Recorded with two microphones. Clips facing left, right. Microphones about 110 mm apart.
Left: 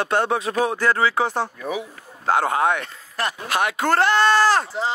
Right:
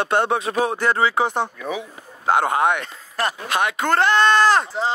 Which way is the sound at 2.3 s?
Centre (ahead or behind).